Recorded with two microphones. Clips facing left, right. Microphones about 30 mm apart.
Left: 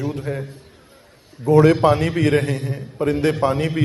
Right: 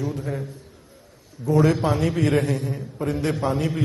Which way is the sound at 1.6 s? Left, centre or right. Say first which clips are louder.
Left 5 dB; left.